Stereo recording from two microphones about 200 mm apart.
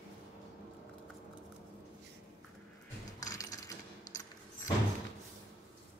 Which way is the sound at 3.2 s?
15° left (ahead or behind).